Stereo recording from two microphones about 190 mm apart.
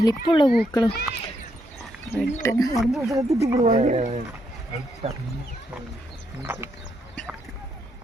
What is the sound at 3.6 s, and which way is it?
Speech, 40° right (ahead or behind).